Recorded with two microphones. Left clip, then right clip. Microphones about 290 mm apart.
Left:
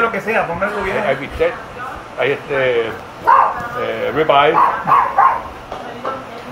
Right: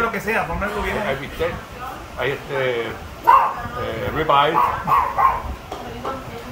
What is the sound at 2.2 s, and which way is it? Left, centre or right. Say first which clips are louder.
Speech: left 6 dB; right.